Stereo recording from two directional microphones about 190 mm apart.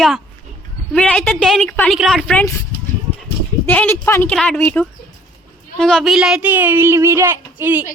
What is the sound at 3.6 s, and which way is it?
Speech, 10° left (ahead or behind).